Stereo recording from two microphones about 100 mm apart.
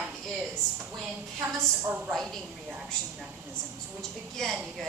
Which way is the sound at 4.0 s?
5° left (ahead or behind).